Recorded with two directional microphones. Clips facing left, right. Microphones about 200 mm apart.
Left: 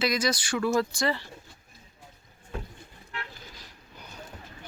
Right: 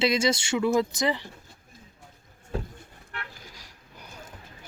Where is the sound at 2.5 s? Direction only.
35° right (ahead or behind).